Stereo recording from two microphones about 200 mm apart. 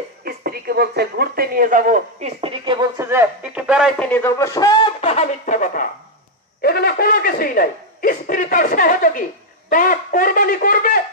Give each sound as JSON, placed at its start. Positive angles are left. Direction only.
{"t": 0.2, "sound": "speech", "side_deg": -50}
{"t": 3.1, "sound": "speech", "side_deg": -10}
{"t": 4.1, "sound": "speech", "side_deg": 10}
{"t": 6.6, "sound": "speech", "side_deg": 50}